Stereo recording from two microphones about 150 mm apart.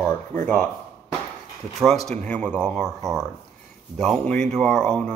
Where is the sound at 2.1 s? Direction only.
10° left (ahead or behind).